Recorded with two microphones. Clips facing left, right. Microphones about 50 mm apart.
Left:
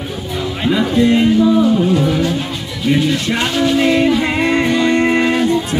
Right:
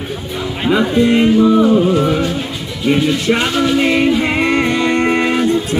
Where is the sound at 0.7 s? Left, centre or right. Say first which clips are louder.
Right 1 dB; centre.